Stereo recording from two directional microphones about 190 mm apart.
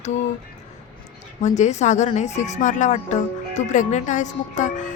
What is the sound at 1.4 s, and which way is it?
Speech, 40° left (ahead or behind).